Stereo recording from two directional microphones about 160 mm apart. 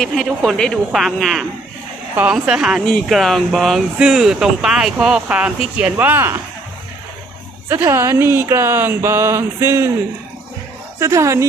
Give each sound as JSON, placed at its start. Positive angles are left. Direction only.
{"t": 0.0, "sound": "speech", "side_deg": 5}
{"t": 7.7, "sound": "speech", "side_deg": -15}
{"t": 11.0, "sound": "speech", "side_deg": -20}